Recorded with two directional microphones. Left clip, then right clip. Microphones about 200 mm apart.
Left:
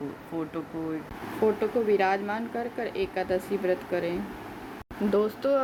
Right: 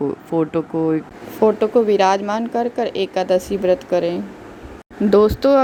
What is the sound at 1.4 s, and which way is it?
Speech, 40° right (ahead or behind).